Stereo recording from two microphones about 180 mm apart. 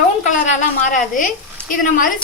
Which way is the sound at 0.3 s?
45° left (ahead or behind).